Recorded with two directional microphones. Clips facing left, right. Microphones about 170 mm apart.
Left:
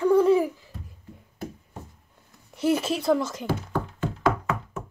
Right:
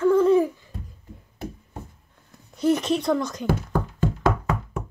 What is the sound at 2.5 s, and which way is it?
Speech, 5° left (ahead or behind).